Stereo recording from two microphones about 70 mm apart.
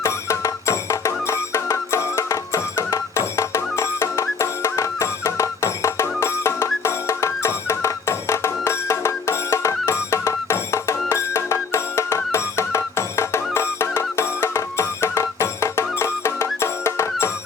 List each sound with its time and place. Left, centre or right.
0.0 s music: left